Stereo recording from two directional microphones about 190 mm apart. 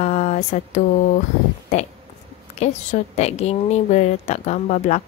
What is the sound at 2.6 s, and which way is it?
A woman's voice, 35° left (ahead or behind).